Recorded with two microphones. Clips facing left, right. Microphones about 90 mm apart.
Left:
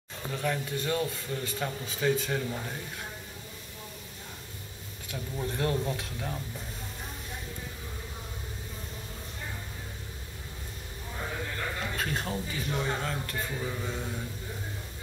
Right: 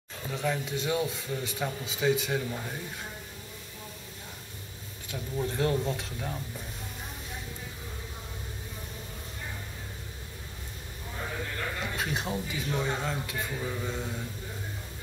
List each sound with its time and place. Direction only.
0.3 s a man's voice: 15° right (ahead or behind)
2.5 s speech: centre (ahead or behind)
5.6 s speech: centre (ahead or behind)
11.1 s a sound: 5° left (ahead or behind)
11.8 s a man's voice: 15° right (ahead or behind); by 14.2 s centre (ahead or behind)